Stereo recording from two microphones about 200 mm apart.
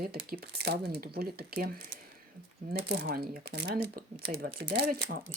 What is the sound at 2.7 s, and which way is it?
Speech, 50° right (ahead or behind).